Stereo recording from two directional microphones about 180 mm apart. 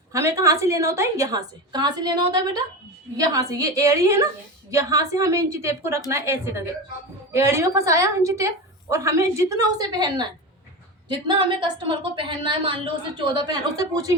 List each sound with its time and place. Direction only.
0.1 s a woman's voice: 15° right (ahead or behind)